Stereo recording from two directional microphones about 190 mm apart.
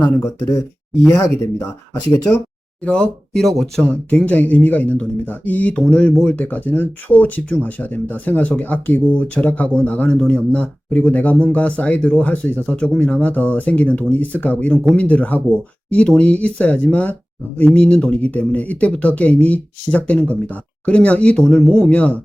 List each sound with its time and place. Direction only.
0.0 s speech: 10° left (ahead or behind)
2.8 s speech: 5° left (ahead or behind)